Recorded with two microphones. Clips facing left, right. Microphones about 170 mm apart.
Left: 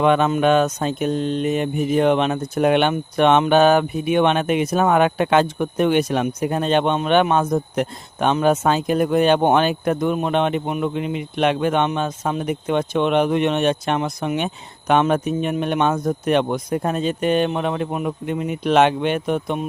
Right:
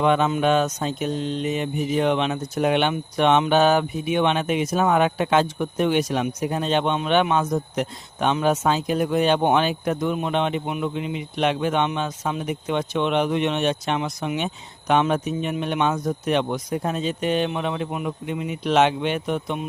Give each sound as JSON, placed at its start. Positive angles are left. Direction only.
{"t": 0.0, "sound": "speech", "side_deg": 60}